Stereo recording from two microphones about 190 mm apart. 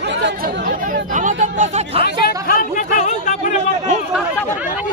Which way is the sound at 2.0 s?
50° left (ahead or behind).